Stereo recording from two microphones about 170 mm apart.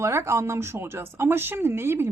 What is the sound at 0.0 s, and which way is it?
Speech, 15° right (ahead or behind).